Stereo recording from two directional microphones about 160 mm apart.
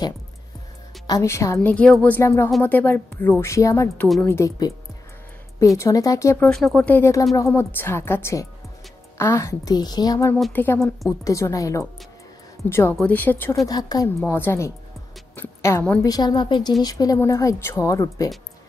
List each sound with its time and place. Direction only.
1.0 s a woman's voice: 20° left (ahead or behind)
5.8 s speech: 20° left (ahead or behind)
6.5 s a woman's voice: 5° left (ahead or behind); by 10.3 s 25° left (ahead or behind)
10.3 s a woman's voice: 10° left (ahead or behind)
13.7 s speech: 25° left (ahead or behind)
14.2 s a woman's voice: 15° left (ahead or behind)